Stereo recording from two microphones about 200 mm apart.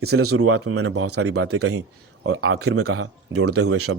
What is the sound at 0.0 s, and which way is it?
Speech, 90° right.